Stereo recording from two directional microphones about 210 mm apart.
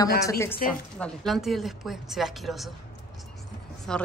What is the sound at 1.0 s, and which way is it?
A woman's voice, centre (ahead or behind).